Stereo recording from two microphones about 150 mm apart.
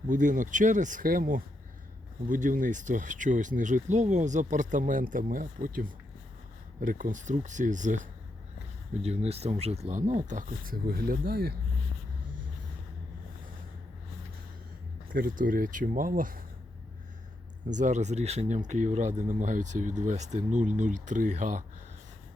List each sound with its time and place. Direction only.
0.1 s speech: 55° right (ahead or behind)
9.0 s speech: 45° right (ahead or behind); by 11.5 s 90° right
15.1 s speech: 70° right (ahead or behind)
17.7 s speech: 55° right (ahead or behind)